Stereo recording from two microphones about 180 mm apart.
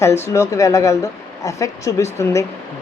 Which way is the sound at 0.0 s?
15° left (ahead or behind).